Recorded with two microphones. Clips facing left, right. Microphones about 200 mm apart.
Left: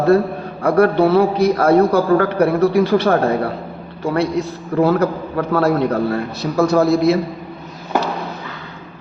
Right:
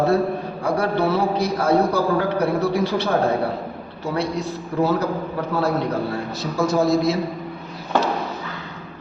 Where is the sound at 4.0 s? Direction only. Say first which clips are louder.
Left 6 dB; 60° left (ahead or behind).